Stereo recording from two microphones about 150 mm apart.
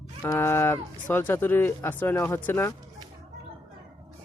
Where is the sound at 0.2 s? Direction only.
15° left (ahead or behind).